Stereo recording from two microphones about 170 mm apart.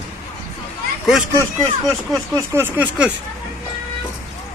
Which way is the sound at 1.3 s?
15° right (ahead or behind).